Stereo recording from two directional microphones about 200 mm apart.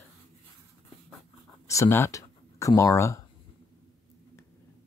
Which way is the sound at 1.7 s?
15° left (ahead or behind).